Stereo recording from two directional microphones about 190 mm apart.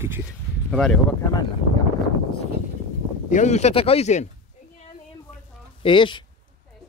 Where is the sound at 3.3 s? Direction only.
35° left (ahead or behind).